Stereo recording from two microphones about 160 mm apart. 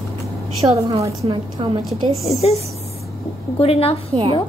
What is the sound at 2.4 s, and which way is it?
A woman's voice, 40° left (ahead or behind).